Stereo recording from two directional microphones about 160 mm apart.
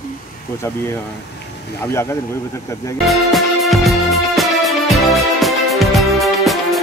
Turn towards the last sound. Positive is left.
turn(degrees=0)  # may be behind; listen again after turning